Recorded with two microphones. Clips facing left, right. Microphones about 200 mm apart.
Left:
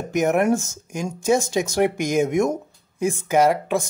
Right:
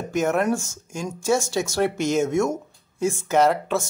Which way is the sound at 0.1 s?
15° left (ahead or behind).